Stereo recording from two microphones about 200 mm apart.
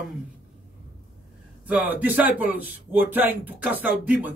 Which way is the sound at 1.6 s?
5° right (ahead or behind).